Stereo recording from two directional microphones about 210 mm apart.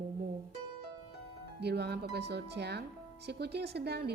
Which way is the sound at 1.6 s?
50° right (ahead or behind).